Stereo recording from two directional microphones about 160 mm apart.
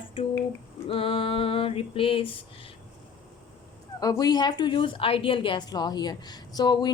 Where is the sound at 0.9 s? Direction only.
35° left (ahead or behind).